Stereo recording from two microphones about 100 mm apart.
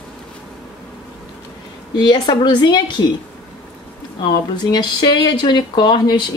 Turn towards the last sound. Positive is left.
turn(degrees=45)  # may be behind; listen again after turning